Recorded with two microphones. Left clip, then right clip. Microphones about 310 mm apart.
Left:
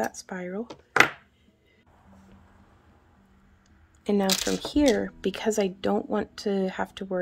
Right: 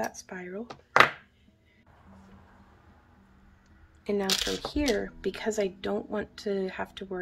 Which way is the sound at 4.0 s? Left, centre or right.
Left.